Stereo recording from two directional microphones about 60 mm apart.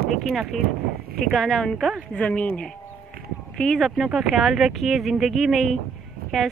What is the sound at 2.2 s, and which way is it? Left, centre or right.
Speech, left.